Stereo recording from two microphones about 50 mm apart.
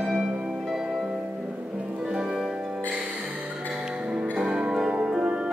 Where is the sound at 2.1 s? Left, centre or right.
Centre.